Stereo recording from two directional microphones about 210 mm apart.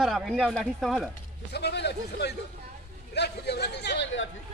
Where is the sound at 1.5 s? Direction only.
50° left (ahead or behind).